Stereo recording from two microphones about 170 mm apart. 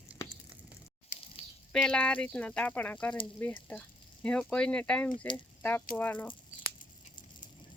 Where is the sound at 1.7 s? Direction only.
5° left (ahead or behind).